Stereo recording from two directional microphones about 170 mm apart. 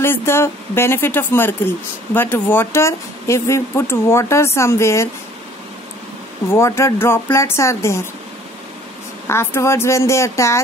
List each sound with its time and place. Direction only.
0.0 s a woman's voice: 15° left (ahead or behind)
6.5 s a woman's voice: 15° left (ahead or behind)
9.3 s a woman's voice: 15° left (ahead or behind)